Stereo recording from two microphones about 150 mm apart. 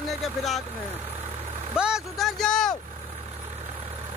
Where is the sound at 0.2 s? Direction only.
Centre (ahead or behind).